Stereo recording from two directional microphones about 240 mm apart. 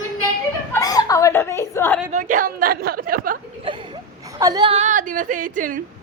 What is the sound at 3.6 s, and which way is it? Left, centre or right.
Speech, centre.